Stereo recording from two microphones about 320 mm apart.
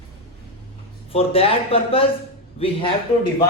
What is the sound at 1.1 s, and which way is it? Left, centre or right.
A man's voice, centre.